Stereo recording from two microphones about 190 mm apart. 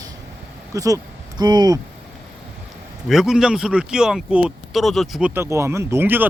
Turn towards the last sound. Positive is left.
turn(degrees=-10)  # may be behind; listen again after turning